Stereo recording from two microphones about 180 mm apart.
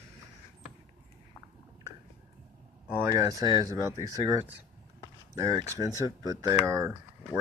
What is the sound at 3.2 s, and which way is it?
Speech, 20° right (ahead or behind).